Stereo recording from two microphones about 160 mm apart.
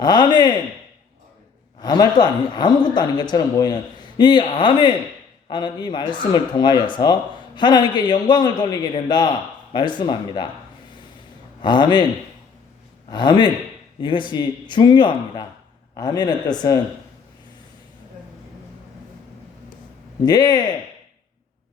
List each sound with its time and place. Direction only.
0.0 s speech: 25° left (ahead or behind)
1.8 s speech: 25° left (ahead or behind)
11.6 s speech: 30° left (ahead or behind)
13.1 s speech: 25° left (ahead or behind)
20.2 s speech: 25° left (ahead or behind)